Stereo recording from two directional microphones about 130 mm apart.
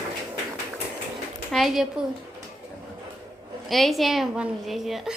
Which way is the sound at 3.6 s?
Centre (ahead or behind).